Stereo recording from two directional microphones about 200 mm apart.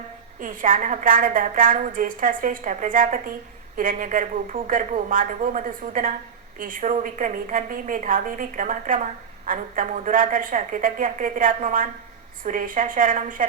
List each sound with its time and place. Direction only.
0.3 s a woman's voice: 40° right (ahead or behind)